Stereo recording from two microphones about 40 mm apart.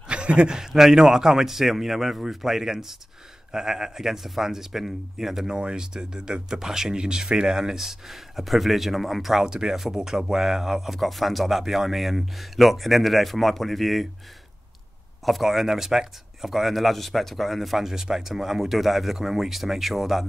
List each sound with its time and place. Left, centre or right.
0.1 s a sound: right
0.6 s speech: centre
5.5 s a man's voice: right; by 14.0 s centre
15.2 s a man's voice: centre